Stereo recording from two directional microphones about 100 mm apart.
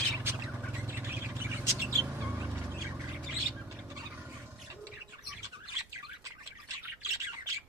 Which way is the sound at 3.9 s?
35° right (ahead or behind).